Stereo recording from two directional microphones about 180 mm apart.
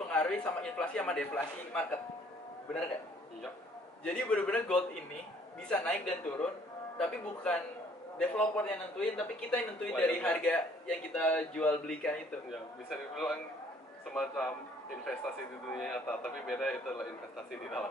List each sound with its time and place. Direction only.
0.1 s a man's voice: 5° left (ahead or behind)
4.0 s speech: 5° left (ahead or behind)